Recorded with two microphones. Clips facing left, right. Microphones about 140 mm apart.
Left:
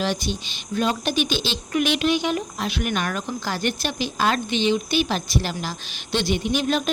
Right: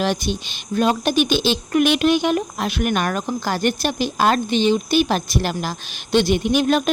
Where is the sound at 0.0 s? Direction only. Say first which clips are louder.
Right 4 dB; 55° right (ahead or behind).